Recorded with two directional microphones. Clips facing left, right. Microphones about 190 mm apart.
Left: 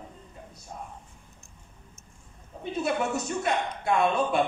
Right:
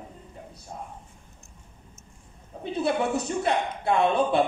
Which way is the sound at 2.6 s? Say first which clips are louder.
Right 2 dB; 30° right (ahead or behind).